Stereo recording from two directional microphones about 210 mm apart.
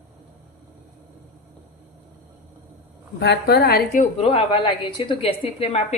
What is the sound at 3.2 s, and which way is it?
A woman's voice, 50° left (ahead or behind).